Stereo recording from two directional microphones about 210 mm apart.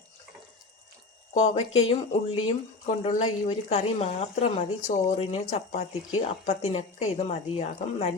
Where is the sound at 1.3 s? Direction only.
30° left (ahead or behind).